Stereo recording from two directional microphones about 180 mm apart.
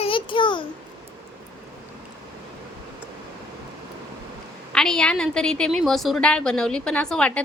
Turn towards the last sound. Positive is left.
turn(degrees=5)  # may be behind; listen again after turning